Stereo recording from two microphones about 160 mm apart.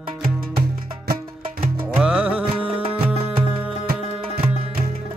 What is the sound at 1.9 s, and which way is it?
Music, 5° right (ahead or behind).